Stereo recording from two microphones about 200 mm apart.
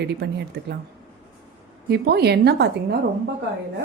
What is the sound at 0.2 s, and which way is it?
Speech, 55° right (ahead or behind).